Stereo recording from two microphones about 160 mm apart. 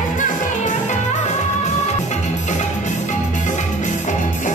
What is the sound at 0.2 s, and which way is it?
Music, 50° left (ahead or behind).